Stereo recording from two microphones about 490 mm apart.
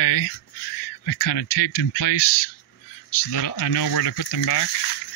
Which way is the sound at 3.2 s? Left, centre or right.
Left.